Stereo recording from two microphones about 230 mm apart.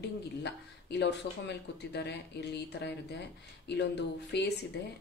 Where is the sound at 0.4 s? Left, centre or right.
Left.